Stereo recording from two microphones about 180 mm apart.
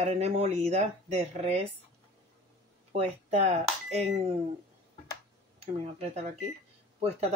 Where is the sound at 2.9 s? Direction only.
40° right (ahead or behind).